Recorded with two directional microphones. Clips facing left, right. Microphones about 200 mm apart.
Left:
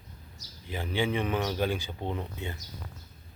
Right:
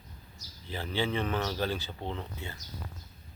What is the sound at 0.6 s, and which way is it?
Speech, 10° left (ahead or behind).